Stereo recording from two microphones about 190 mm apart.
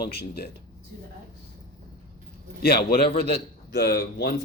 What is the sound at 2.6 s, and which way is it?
Speech, 55° left (ahead or behind).